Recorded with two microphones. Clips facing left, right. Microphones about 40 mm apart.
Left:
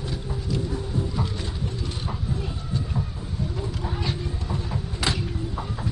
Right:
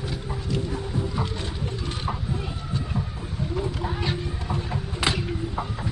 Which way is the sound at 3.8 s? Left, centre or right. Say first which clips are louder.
Right 1 dB; right.